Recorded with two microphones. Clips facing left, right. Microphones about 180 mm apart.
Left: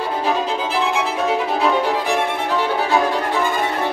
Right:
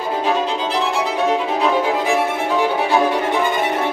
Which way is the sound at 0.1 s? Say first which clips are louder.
Right 3 dB; 5° left (ahead or behind).